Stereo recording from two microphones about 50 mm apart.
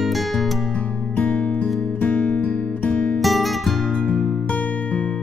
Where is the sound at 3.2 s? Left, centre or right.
Centre.